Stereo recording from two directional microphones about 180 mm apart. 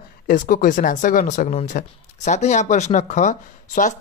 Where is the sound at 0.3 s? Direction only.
50° left (ahead or behind).